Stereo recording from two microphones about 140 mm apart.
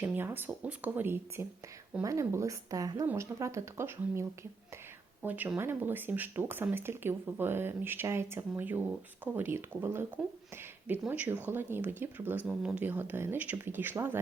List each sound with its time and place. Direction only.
0.0 s speech: 15° right (ahead or behind)